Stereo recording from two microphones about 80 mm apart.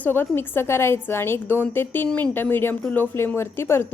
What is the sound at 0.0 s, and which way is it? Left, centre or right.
A woman's voice, left.